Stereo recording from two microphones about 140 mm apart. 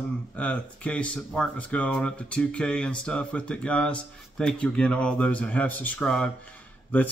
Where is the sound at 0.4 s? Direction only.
10° left (ahead or behind).